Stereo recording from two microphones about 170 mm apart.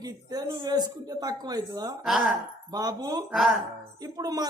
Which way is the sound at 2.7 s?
20° right (ahead or behind).